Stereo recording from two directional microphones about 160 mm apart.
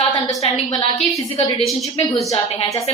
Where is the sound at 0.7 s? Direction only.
30° left (ahead or behind).